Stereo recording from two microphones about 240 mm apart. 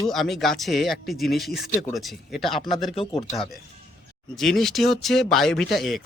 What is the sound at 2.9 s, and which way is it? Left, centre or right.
Speech, left.